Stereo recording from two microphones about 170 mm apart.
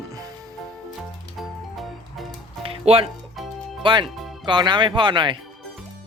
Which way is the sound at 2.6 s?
35° right (ahead or behind).